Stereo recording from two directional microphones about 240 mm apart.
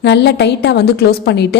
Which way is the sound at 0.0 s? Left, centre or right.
Left.